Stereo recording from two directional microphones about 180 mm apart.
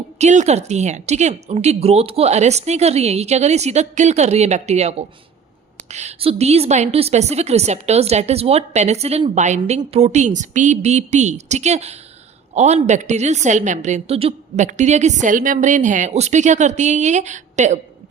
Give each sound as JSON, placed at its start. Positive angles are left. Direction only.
{"t": 0.2, "sound": "a woman's voice", "side_deg": -40}